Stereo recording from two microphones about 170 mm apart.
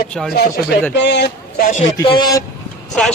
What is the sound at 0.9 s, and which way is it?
Speech, 90° left.